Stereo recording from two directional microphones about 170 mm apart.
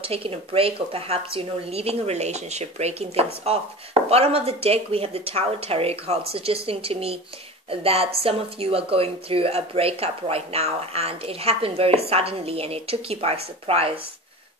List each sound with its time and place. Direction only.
0.0 s speech: 35° right (ahead or behind)